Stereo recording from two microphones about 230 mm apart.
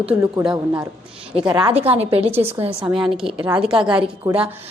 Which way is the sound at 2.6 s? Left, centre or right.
Centre.